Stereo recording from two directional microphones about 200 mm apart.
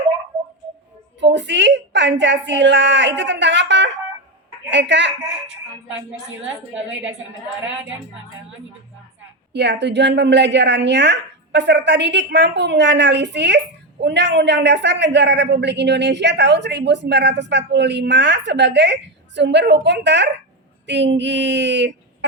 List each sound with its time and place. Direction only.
1.2 s a woman's voice: 60° right (ahead or behind)
9.5 s a woman's voice: 60° right (ahead or behind)